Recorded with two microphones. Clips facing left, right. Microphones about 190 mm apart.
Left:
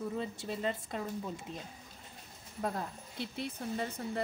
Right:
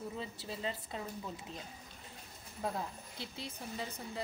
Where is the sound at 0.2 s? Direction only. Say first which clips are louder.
Left 5 dB; 50° left (ahead or behind).